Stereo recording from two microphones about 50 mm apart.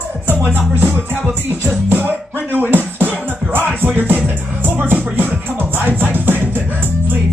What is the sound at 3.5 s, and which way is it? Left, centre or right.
Music, right.